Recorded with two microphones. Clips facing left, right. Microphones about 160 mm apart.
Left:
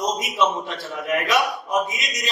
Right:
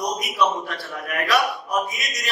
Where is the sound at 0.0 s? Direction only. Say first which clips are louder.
Left 1 dB; 20° left (ahead or behind).